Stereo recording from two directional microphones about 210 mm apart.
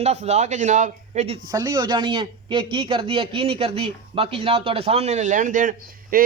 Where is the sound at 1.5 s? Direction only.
15° right (ahead or behind); by 6.2 s 40° right (ahead or behind).